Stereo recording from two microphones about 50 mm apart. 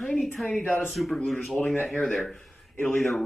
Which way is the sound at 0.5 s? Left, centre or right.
Left.